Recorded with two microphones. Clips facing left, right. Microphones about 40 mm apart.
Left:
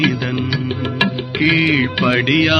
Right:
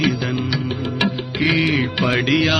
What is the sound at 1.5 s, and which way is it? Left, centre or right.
Music, left.